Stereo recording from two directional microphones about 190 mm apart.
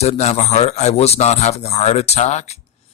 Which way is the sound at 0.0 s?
35° left (ahead or behind).